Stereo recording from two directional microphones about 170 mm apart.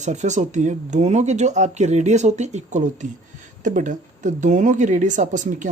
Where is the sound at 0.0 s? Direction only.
45° right (ahead or behind).